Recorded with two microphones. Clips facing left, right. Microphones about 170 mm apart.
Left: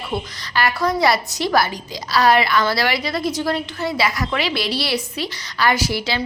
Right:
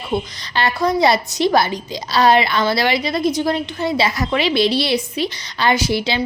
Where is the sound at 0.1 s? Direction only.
20° right (ahead or behind).